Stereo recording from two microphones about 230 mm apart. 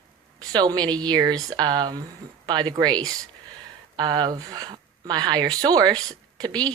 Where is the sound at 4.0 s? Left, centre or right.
Centre.